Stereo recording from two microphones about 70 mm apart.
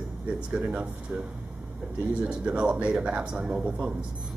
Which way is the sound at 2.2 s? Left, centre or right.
Centre.